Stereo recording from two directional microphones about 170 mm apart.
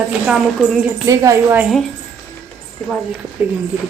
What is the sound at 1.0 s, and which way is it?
Speech, 20° right (ahead or behind).